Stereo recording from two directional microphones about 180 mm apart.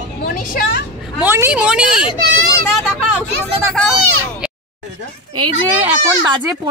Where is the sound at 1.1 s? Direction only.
10° right (ahead or behind).